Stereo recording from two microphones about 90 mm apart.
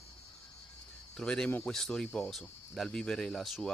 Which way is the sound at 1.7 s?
5° left (ahead or behind).